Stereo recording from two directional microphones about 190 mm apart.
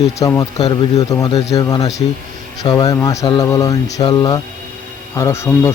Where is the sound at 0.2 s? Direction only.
15° left (ahead or behind).